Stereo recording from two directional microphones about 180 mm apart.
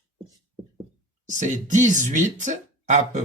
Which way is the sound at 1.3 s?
45° right (ahead or behind).